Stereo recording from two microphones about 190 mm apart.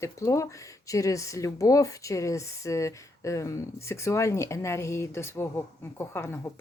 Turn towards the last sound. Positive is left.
turn(degrees=10)  # may be behind; listen again after turning